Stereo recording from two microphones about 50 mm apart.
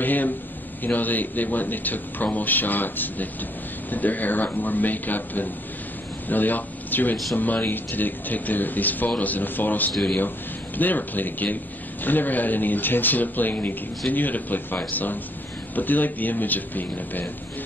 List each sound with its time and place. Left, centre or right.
0.0 s a man's voice: left